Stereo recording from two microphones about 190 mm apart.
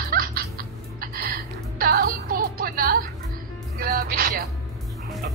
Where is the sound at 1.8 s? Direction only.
50° right (ahead or behind).